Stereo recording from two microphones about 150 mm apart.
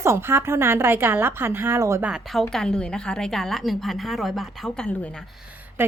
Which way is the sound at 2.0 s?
Centre (ahead or behind).